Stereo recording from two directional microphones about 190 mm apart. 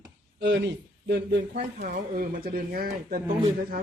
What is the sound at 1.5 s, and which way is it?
Speech, 45° right (ahead or behind).